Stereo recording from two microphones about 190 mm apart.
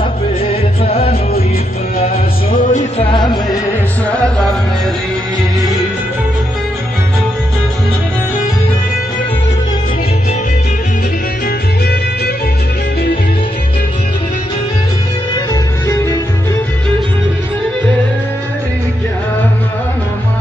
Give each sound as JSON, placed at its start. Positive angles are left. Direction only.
{"t": 0.5, "sound": "music", "side_deg": 30}
{"t": 2.5, "sound": "music", "side_deg": 40}
{"t": 3.1, "sound": "music", "side_deg": 20}
{"t": 4.1, "sound": "music", "side_deg": 5}
{"t": 15.9, "sound": "music", "side_deg": 15}